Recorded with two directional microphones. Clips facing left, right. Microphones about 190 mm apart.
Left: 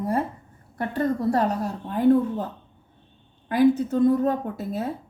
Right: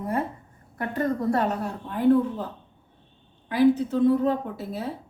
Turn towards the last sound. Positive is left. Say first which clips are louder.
# left 3 dB
turn(degrees=45)  # may be behind; listen again after turning